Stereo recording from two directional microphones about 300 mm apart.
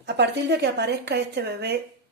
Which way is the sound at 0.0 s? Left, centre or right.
Right.